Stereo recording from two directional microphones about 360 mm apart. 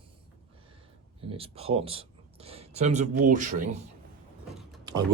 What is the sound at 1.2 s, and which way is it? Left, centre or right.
Speech, centre.